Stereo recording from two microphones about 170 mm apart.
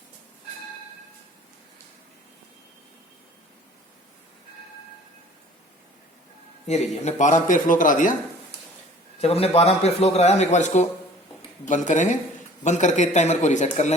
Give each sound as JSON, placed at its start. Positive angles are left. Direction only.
{"t": 6.7, "sound": "a man's voice", "side_deg": 40}
{"t": 9.2, "sound": "a man's voice", "side_deg": 35}